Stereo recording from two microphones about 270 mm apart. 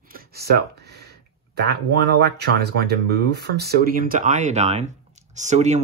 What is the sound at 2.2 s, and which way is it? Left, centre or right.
Speech, right.